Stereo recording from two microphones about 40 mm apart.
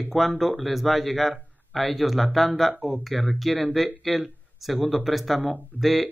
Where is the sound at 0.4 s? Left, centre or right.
Centre.